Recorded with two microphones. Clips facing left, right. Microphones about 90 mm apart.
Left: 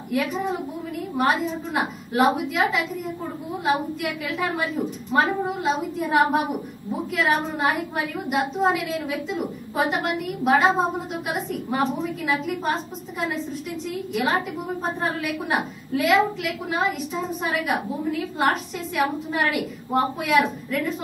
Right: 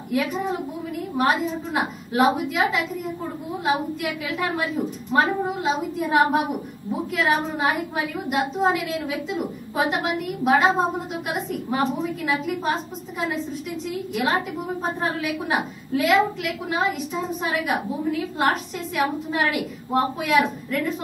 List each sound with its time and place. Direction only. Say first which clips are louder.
0.1 s a woman's voice: even; centre (ahead or behind)